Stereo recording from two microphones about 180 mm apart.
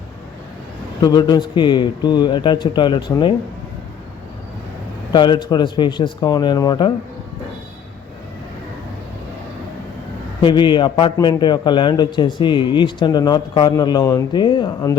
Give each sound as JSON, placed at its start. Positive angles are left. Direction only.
{"t": 1.0, "sound": "a man's voice", "side_deg": 25}
{"t": 5.1, "sound": "a man's voice", "side_deg": 25}
{"t": 10.4, "sound": "a man's voice", "side_deg": 25}